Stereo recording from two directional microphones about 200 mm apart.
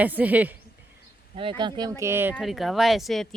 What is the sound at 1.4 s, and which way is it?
Speech, 25° right (ahead or behind).